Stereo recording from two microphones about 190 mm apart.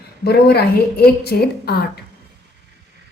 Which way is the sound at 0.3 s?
55° left (ahead or behind).